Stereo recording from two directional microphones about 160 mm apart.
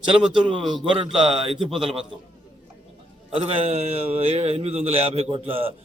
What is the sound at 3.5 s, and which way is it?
A man's voice, 40° right (ahead or behind).